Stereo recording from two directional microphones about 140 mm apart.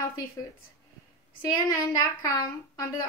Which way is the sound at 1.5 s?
30° left (ahead or behind).